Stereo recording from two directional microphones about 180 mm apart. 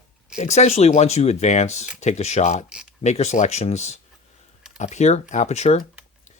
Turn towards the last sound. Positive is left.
turn(degrees=40)  # may be behind; listen again after turning